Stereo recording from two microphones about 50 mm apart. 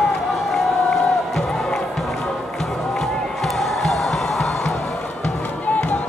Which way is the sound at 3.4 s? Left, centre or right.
Centre.